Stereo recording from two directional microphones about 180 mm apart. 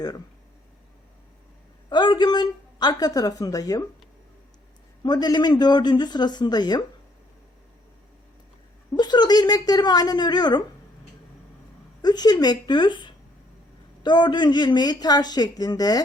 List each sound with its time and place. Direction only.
1.9 s speech: 25° left (ahead or behind)
5.0 s speech: 25° left (ahead or behind)
8.9 s speech: 25° left (ahead or behind)
12.0 s speech: 20° left (ahead or behind)